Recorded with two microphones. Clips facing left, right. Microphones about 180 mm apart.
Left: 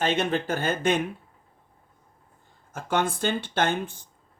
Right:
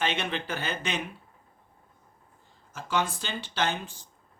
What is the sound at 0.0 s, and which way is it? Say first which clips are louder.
Speech: left 6 dB; 45° left (ahead or behind).